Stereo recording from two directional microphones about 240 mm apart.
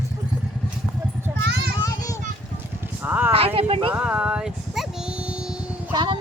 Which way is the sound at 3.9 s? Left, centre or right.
Centre.